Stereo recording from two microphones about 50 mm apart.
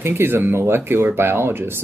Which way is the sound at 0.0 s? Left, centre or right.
Right.